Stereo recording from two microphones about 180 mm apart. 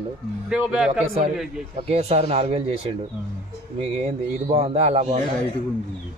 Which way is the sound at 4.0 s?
35° right (ahead or behind).